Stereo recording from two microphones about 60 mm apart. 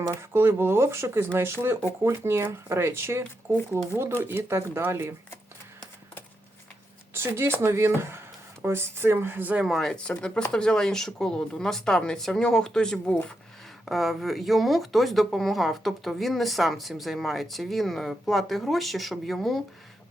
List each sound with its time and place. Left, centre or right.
0.2 s speech: right
4.2 s speech: right
4.9 s speech: right
7.1 s speech: right
9.6 s speech: centre
9.9 s speech: centre
13.8 s speech: centre